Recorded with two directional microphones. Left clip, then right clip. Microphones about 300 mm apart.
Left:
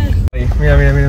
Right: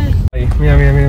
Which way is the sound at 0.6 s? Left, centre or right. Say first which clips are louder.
Left 1 dB; centre.